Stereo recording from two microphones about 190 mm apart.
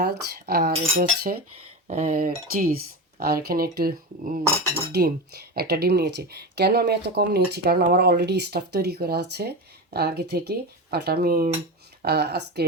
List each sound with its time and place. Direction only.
0.0 s speech: 55° right (ahead or behind)